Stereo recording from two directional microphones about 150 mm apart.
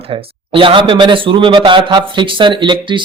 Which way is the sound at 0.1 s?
35° right (ahead or behind).